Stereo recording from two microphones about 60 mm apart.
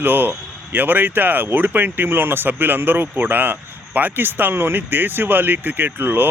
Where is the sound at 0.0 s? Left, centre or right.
Right.